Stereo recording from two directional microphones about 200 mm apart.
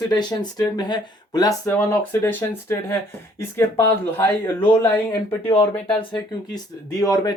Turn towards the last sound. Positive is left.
turn(degrees=15)  # may be behind; listen again after turning